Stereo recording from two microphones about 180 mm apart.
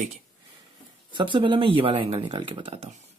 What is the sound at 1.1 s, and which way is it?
Speech, 25° right (ahead or behind).